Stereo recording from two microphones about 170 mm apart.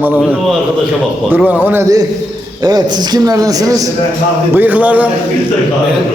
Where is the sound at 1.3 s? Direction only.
10° right (ahead or behind).